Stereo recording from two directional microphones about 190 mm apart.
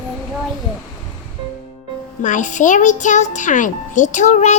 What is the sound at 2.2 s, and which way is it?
A child's voice, 40° left (ahead or behind).